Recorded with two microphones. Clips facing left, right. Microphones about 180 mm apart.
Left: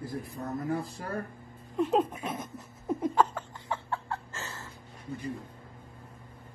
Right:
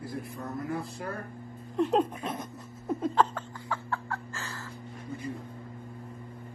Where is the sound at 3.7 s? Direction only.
25° left (ahead or behind).